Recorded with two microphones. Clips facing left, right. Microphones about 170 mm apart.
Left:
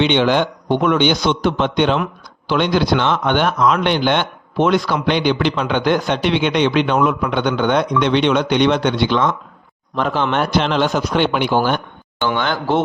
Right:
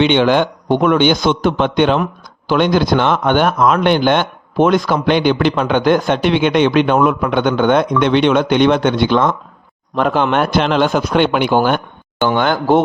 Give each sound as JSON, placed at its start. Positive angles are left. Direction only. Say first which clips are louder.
{"t": 0.0, "sound": "a man's voice", "louder": "right 3 dB", "side_deg": -50}